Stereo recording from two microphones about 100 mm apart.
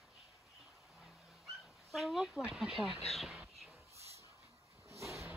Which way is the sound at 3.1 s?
Centre (ahead or behind).